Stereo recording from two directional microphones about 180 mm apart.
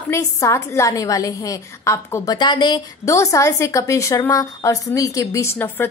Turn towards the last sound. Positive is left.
turn(degrees=10)  # may be behind; listen again after turning